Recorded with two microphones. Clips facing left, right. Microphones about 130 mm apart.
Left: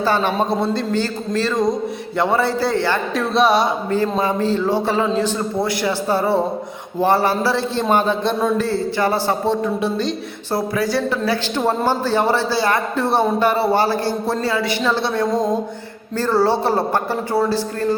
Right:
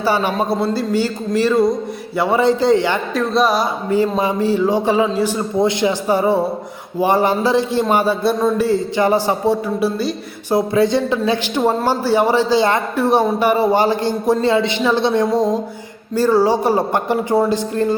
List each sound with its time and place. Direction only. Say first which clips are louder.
0.0 s a man's voice: right 1 dB; 10° right (ahead or behind)
3.2 s speech: even; centre (ahead or behind)
3.8 s a man's voice: right 2 dB; 15° right (ahead or behind)
10.5 s a man's voice: right 5 dB; 20° right (ahead or behind)